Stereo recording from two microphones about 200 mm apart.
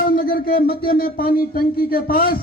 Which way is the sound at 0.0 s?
45° left (ahead or behind).